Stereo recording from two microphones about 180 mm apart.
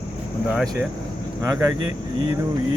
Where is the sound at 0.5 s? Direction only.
Centre (ahead or behind).